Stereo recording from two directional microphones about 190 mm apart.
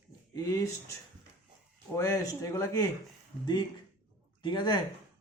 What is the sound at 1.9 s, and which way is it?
Speech, 15° left (ahead or behind).